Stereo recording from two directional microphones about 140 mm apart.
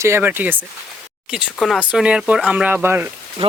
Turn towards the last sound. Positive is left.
turn(degrees=-45)  # may be behind; listen again after turning